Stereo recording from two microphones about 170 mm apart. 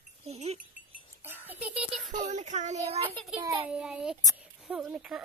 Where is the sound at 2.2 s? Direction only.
45° right (ahead or behind).